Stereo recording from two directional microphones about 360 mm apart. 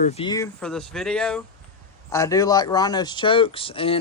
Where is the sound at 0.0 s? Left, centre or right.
Centre.